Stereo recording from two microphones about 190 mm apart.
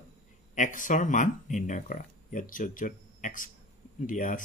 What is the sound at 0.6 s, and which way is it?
Speech, 45° left (ahead or behind).